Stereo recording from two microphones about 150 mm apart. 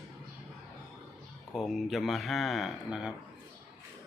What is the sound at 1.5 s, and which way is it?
Speech, centre (ahead or behind).